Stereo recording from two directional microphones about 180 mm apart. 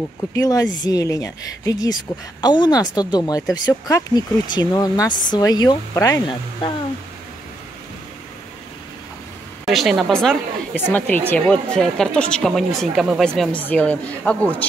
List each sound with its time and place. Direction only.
0.2 s speech: 15° left (ahead or behind)
9.7 s speech: centre (ahead or behind)